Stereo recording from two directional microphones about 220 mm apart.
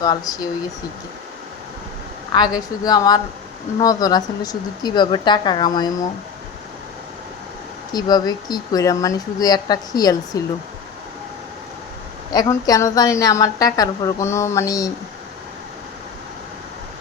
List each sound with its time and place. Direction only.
0.0 s a woman's voice: 15° left (ahead or behind)
2.3 s a woman's voice: 20° left (ahead or behind)
7.9 s a woman's voice: 20° left (ahead or behind)
12.3 s a woman's voice: 15° left (ahead or behind)